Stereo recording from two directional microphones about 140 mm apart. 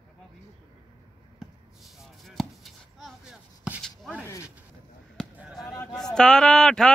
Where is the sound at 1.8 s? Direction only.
Centre (ahead or behind).